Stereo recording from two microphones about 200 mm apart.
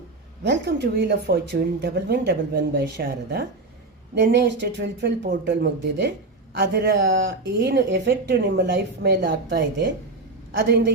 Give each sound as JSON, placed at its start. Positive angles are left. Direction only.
{"t": 0.4, "sound": "speech", "side_deg": -60}
{"t": 2.7, "sound": "speech", "side_deg": -50}
{"t": 4.1, "sound": "speech", "side_deg": -60}